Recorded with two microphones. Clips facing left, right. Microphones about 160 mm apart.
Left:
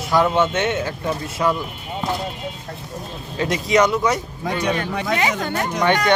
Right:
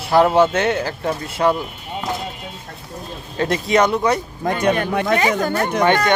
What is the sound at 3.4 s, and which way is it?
Speech, 55° right (ahead or behind).